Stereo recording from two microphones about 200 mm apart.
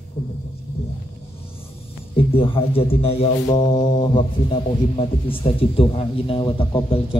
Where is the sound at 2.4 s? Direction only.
25° left (ahead or behind).